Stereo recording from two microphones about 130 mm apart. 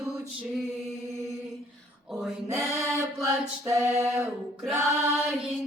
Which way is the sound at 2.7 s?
20° right (ahead or behind).